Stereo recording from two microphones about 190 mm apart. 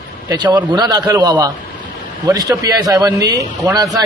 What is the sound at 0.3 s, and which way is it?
A man's voice, 20° right (ahead or behind).